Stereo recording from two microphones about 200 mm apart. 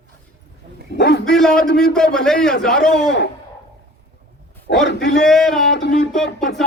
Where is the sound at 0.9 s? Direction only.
60° left (ahead or behind).